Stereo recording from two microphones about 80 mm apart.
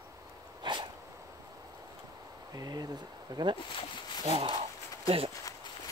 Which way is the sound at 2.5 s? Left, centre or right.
Right.